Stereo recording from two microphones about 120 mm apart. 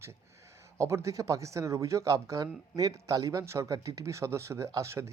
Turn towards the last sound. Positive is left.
turn(degrees=-25)  # may be behind; listen again after turning